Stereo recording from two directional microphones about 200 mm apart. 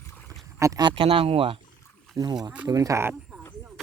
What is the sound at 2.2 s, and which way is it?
Speech, 15° right (ahead or behind).